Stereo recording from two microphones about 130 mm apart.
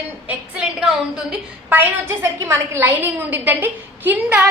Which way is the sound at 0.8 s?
5° right (ahead or behind).